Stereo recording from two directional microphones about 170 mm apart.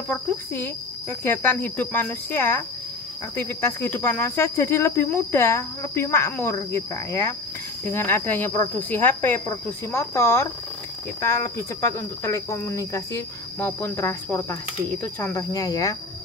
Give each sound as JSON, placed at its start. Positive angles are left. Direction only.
{"t": 0.1, "sound": "speech", "side_deg": 10}